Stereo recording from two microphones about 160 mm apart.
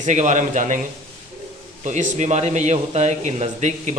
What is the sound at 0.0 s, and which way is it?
Speech, 45° right (ahead or behind).